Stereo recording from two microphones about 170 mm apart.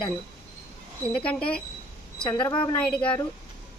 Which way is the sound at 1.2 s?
5° left (ahead or behind).